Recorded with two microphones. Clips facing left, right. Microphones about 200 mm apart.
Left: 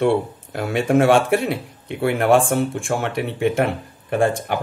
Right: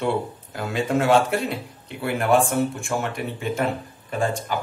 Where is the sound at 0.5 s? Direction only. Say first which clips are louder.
Left 6 dB; 65° left (ahead or behind).